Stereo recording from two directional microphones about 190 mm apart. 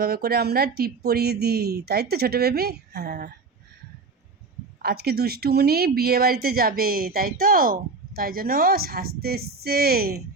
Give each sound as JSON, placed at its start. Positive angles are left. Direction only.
{"t": 0.0, "sound": "speech", "side_deg": -55}
{"t": 4.8, "sound": "speech", "side_deg": -55}